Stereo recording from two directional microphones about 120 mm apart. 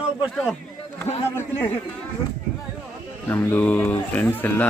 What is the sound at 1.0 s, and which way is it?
Speech, 20° left (ahead or behind).